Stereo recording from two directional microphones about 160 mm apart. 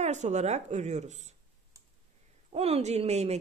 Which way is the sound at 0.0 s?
45° right (ahead or behind).